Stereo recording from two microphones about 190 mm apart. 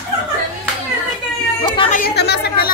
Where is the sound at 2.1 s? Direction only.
60° left (ahead or behind).